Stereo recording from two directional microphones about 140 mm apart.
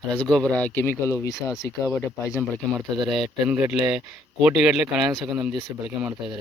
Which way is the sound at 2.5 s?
Centre (ahead or behind).